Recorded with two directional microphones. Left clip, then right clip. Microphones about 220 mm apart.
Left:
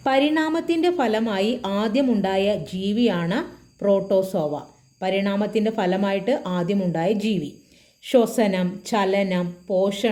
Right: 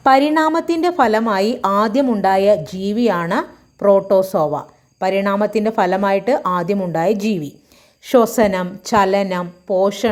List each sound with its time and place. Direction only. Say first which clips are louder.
0.0 s a woman's voice: right 7 dB; 20° right (ahead or behind)